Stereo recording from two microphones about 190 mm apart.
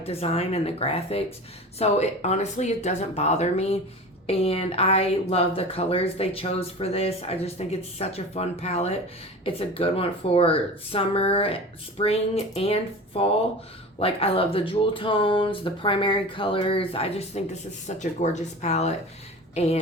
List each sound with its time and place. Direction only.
0.0 s speech: 30° left (ahead or behind)